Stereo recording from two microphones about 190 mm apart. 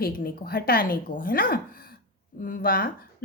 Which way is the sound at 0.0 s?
50° left (ahead or behind).